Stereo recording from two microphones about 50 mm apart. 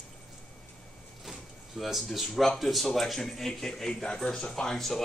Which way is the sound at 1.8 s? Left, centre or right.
Centre.